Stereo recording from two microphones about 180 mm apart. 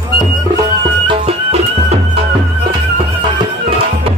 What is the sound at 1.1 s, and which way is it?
Music, 35° right (ahead or behind).